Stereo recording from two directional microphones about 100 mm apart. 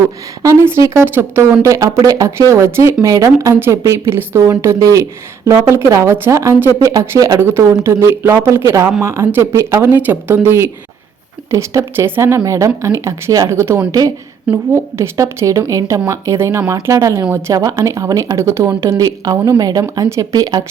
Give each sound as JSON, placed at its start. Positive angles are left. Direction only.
{"t": 0.0, "sound": "speech", "side_deg": -30}